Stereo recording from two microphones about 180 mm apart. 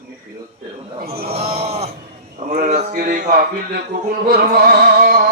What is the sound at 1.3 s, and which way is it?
Speech, 35° right (ahead or behind).